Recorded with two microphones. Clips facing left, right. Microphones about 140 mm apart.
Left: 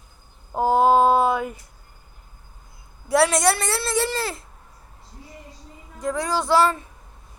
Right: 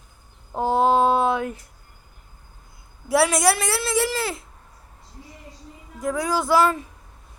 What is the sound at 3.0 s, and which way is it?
A woman's voice, centre (ahead or behind).